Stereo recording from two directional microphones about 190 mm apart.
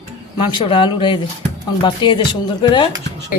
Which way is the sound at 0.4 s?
25° left (ahead or behind).